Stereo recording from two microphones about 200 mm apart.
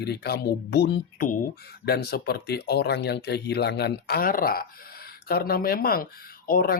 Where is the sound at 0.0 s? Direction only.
55° left (ahead or behind).